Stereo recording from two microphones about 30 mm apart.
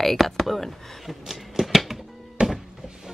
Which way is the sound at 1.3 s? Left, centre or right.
Centre.